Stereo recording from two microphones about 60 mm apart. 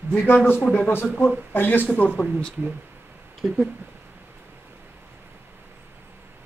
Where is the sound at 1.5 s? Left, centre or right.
Left.